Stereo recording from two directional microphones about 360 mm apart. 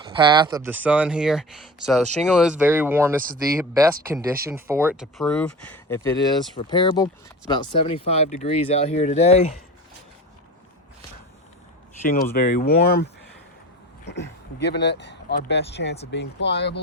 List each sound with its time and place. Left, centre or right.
0.0 s speech: centre
12.0 s speech: left
14.1 s speech: left